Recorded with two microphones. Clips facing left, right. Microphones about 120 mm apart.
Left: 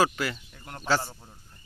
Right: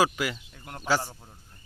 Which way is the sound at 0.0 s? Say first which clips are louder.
Even; 10° right (ahead or behind).